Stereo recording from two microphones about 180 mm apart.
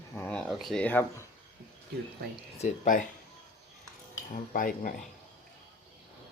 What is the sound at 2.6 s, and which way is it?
Speech, 45° left (ahead or behind).